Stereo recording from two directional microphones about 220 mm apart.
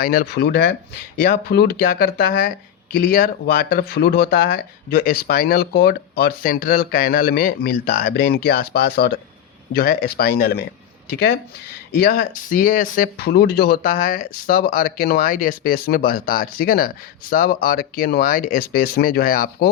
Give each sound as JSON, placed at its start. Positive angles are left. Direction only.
{"t": 0.0, "sound": "speech", "side_deg": 45}